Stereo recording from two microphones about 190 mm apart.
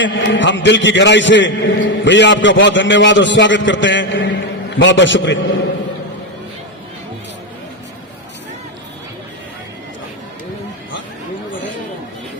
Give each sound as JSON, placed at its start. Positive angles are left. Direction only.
{"t": 0.0, "sound": "a man's voice", "side_deg": 75}